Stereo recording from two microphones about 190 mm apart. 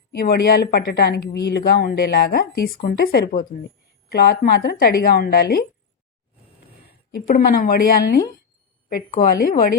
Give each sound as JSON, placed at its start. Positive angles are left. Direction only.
{"t": 0.1, "sound": "speech", "side_deg": 55}
{"t": 7.3, "sound": "speech", "side_deg": 45}